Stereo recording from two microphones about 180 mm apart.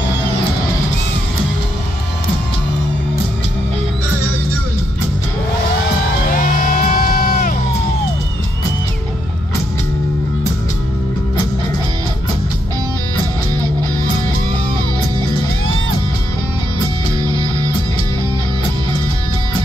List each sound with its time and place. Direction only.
6.3 s music: 50° left (ahead or behind)
17.2 s music: 20° right (ahead or behind)